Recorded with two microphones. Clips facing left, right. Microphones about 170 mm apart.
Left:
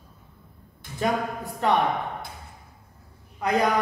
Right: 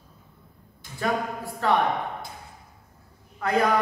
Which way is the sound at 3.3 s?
20° left (ahead or behind).